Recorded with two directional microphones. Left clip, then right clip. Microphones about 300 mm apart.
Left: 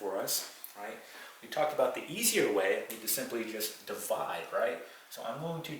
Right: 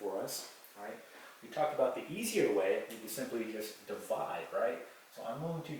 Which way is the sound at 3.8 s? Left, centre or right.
Centre.